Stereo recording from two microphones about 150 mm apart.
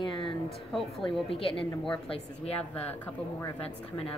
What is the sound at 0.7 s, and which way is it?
Speech, 5° left (ahead or behind).